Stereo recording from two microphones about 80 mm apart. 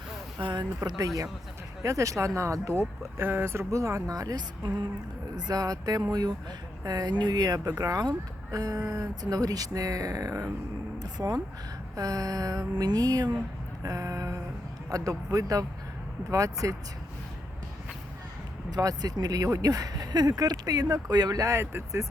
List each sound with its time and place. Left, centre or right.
0.3 s speech: right
0.9 s speech: right
11.0 s speech: right
18.7 s speech: right